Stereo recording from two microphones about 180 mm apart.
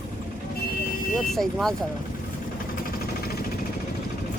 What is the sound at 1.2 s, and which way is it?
Speech, centre (ahead or behind).